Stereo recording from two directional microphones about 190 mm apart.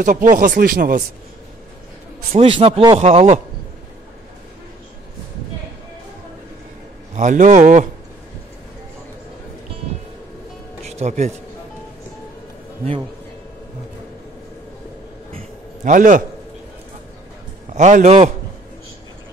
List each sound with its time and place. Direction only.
0.0 s speech: 45° right (ahead or behind)
2.3 s a man's voice: 30° right (ahead or behind)
7.2 s speech: 40° right (ahead or behind)
11.0 s speech: 35° right (ahead or behind)
15.3 s a sound: 45° right (ahead or behind)
17.7 s speech: 40° right (ahead or behind)